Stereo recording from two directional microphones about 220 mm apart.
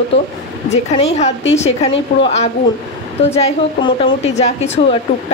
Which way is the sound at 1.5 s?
30° left (ahead or behind).